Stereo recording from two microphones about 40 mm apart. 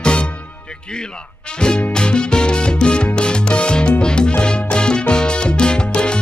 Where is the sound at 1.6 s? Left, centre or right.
Left.